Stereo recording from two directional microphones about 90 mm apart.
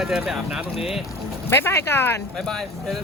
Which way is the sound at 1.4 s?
25° left (ahead or behind).